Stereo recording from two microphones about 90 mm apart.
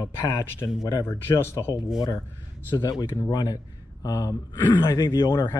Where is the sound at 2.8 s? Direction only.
50° left (ahead or behind).